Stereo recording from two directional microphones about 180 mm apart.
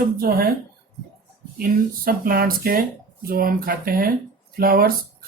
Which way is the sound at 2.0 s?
55° right (ahead or behind).